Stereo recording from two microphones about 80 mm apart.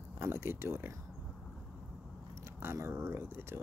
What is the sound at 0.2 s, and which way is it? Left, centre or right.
Speech, right.